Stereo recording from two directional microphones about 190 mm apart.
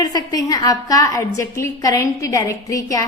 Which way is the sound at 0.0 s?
20° left (ahead or behind).